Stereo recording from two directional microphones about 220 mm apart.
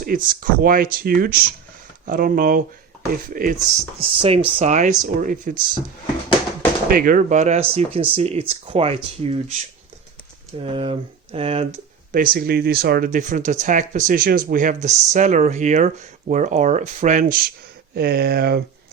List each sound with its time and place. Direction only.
0.0 s speech: 40° right (ahead or behind)
4.0 s speech: 25° right (ahead or behind)
6.8 s speech: 40° right (ahead or behind)
10.6 s speech: 25° right (ahead or behind)
12.1 s speech: 40° right (ahead or behind)